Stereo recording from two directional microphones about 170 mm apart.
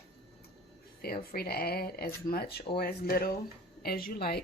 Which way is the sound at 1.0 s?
65° left (ahead or behind).